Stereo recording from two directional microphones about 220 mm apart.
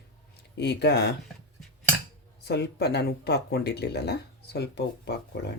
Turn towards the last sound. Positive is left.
turn(degrees=50)  # may be behind; listen again after turning